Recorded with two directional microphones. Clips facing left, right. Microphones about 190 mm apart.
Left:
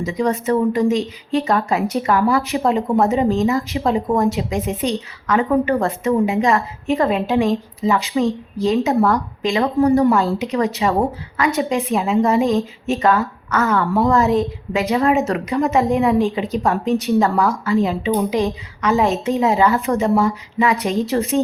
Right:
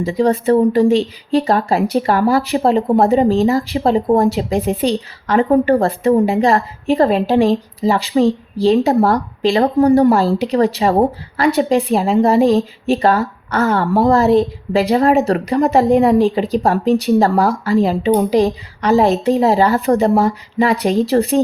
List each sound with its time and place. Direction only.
0.0 s speech: 30° right (ahead or behind)